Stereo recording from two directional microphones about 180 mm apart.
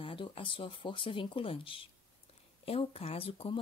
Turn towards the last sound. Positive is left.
turn(degrees=30)  # may be behind; listen again after turning